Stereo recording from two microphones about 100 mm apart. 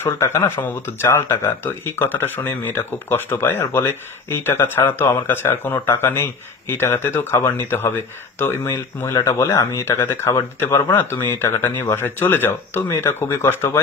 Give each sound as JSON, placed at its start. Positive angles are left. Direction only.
{"t": 0.0, "sound": "speech", "side_deg": 25}